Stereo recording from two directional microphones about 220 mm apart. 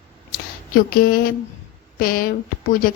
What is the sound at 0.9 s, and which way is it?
Speech, 40° left (ahead or behind).